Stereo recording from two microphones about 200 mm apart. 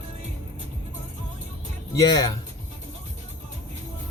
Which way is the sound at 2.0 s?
20° left (ahead or behind).